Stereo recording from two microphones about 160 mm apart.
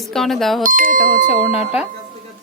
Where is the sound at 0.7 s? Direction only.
60° right (ahead or behind).